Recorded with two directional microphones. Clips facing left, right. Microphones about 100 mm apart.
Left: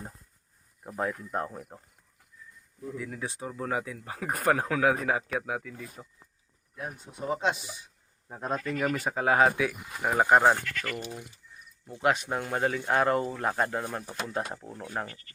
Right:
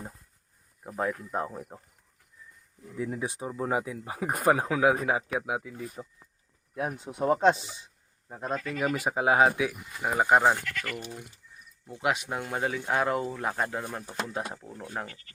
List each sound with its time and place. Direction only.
0.9 s speech: centre (ahead or behind)
3.0 s speech: 25° right (ahead or behind)
6.7 s speech: 80° right
7.5 s speech: 25° right (ahead or behind)
8.3 s speech: centre (ahead or behind)
8.7 s speech: 15° right (ahead or behind); by 11.0 s 5° left (ahead or behind)
11.9 s speech: 10° right (ahead or behind)